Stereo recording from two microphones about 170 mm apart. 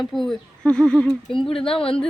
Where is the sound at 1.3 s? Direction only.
30° left (ahead or behind).